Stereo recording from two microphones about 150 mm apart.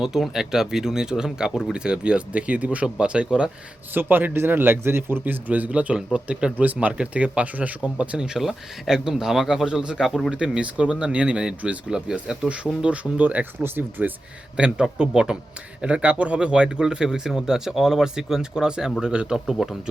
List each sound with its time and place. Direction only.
0.0 s speech: 5° right (ahead or behind)